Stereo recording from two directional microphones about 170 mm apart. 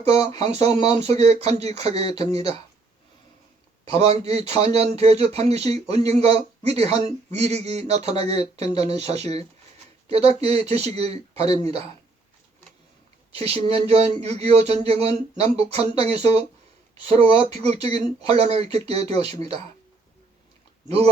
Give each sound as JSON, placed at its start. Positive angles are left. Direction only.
{"t": 0.4, "sound": "a man's voice", "side_deg": -40}
{"t": 3.9, "sound": "a man's voice", "side_deg": -35}
{"t": 13.3, "sound": "a man's voice", "side_deg": -35}
{"t": 20.8, "sound": "speech", "side_deg": -40}